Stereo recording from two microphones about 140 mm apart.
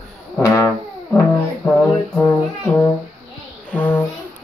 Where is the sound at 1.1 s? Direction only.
10° left (ahead or behind).